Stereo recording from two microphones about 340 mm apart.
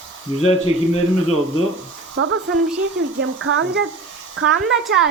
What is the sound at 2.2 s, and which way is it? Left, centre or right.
A woman's voice, right.